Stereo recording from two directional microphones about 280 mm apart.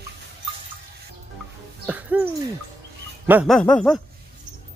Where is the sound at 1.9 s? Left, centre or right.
Centre.